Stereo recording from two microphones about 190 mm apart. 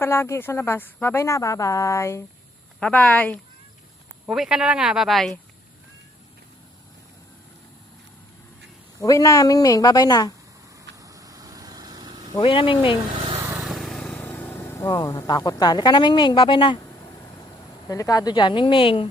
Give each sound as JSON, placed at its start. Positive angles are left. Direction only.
{"t": 0.0, "sound": "a woman's voice", "side_deg": 15}
{"t": 4.3, "sound": "speech", "side_deg": -5}
{"t": 9.0, "sound": "speech", "side_deg": 15}
{"t": 10.9, "sound": "vehicle", "side_deg": -20}
{"t": 12.4, "sound": "speech", "side_deg": 30}
{"t": 13.4, "sound": "vehicle", "side_deg": -5}
{"t": 17.8, "sound": "speech", "side_deg": 20}